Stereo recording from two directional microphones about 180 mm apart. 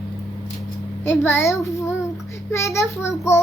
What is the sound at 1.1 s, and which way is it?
A child's voice, 15° left (ahead or behind).